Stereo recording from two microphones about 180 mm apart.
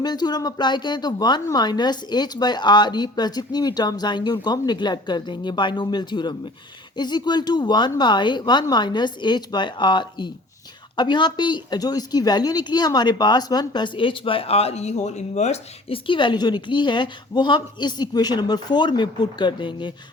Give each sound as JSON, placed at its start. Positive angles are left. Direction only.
{"t": 0.0, "sound": "a woman's voice", "side_deg": 20}